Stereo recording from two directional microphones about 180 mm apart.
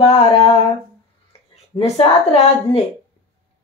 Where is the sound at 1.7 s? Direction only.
35° left (ahead or behind).